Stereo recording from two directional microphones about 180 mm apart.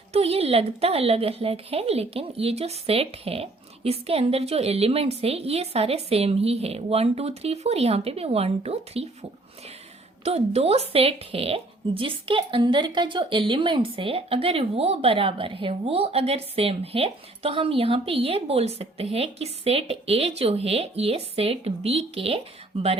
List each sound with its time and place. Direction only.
0.1 s speech: 35° right (ahead or behind)
10.2 s speech: 35° right (ahead or behind)